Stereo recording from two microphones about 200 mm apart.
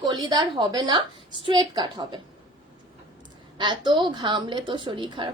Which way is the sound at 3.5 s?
25° right (ahead or behind).